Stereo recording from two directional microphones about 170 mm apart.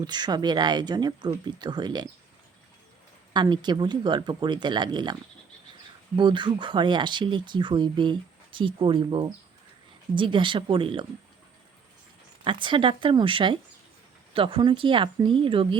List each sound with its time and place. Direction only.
0.0 s speech: 25° right (ahead or behind)
3.3 s speech: 25° right (ahead or behind)
6.1 s speech: 25° right (ahead or behind)
12.5 s speech: 30° right (ahead or behind)